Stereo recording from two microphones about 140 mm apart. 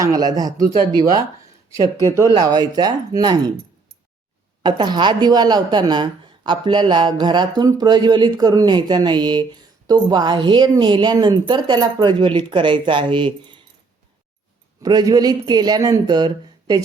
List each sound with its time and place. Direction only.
0.0 s speech: 25° right (ahead or behind)
1.7 s speech: 20° right (ahead or behind)
4.6 s speech: 30° right (ahead or behind)
14.8 s speech: 30° right (ahead or behind)